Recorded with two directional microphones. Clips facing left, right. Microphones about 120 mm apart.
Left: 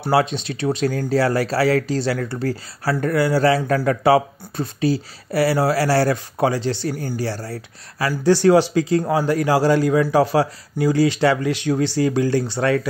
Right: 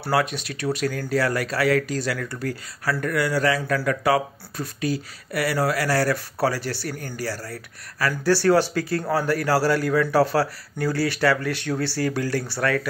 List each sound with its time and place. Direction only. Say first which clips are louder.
0.0 s a man's voice: left 4 dB; 25° left (ahead or behind)